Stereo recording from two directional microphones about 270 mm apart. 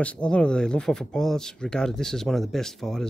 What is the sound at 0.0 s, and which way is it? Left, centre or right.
Speech, centre.